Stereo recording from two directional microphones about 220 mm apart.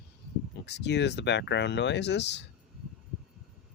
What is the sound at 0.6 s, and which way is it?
Speech, 50° left (ahead or behind).